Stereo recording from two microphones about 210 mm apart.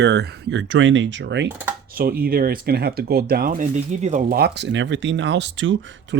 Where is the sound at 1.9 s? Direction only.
45° right (ahead or behind); by 5.8 s 65° right (ahead or behind).